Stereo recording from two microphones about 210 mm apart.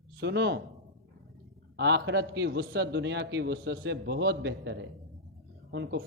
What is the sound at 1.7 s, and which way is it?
A man's voice, 55° right (ahead or behind).